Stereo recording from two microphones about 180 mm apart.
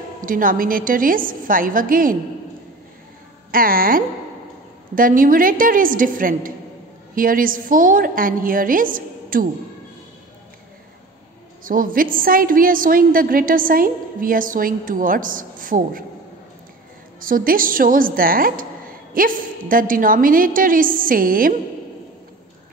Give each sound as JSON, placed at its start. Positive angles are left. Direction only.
{"t": 0.2, "sound": "a woman's voice", "side_deg": -50}
{"t": 3.5, "sound": "a woman's voice", "side_deg": -50}
{"t": 11.6, "sound": "a woman's voice", "side_deg": -50}
{"t": 17.2, "sound": "a woman's voice", "side_deg": -50}